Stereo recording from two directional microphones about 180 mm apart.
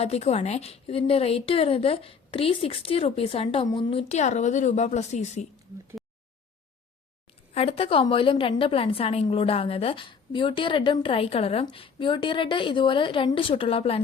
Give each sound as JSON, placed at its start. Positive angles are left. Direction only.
{"t": 0.0, "sound": "a woman's voice", "side_deg": 35}
{"t": 7.5, "sound": "a woman's voice", "side_deg": 35}